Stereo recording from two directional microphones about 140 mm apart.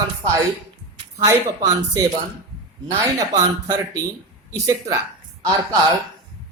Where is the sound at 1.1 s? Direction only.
25° right (ahead or behind).